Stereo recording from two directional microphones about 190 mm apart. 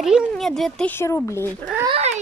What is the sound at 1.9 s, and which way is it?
Speech, 35° right (ahead or behind).